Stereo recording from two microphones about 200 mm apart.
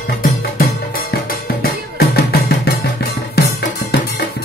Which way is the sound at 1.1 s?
50° left (ahead or behind).